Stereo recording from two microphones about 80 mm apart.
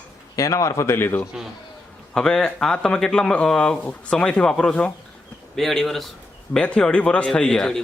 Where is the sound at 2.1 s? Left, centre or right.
Centre.